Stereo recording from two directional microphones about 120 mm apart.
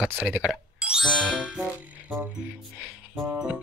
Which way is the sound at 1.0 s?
10° left (ahead or behind).